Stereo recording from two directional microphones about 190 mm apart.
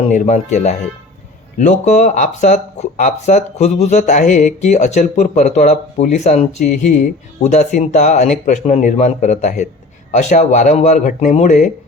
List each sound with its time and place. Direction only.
0.0 s speech: 35° left (ahead or behind)